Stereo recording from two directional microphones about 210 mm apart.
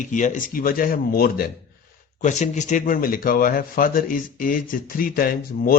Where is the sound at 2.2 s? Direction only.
35° left (ahead or behind).